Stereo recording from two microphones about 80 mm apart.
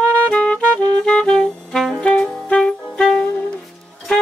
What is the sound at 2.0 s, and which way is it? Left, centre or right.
Saxophone, centre.